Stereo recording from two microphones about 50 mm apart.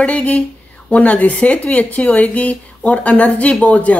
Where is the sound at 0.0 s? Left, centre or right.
Left.